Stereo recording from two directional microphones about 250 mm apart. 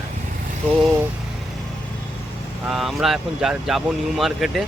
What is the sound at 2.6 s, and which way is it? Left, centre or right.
Speech, centre.